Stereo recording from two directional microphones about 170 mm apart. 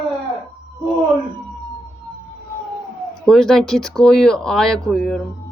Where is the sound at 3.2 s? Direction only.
5° left (ahead or behind).